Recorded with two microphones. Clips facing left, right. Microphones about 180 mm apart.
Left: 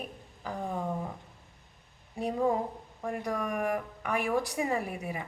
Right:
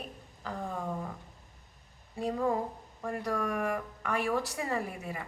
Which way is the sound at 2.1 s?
15° left (ahead or behind).